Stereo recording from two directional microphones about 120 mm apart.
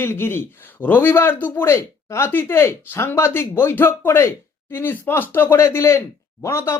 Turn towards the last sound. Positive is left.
turn(degrees=20)  # may be behind; listen again after turning